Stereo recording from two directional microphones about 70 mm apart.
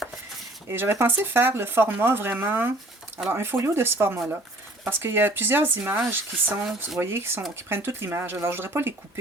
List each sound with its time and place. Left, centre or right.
0.7 s speech: right